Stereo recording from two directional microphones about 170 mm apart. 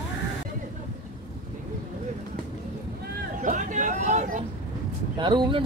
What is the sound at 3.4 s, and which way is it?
Vehicle, 45° right (ahead or behind).